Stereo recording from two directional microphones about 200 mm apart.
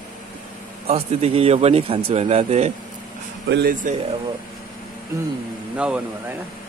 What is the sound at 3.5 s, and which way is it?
Speech, 55° right (ahead or behind).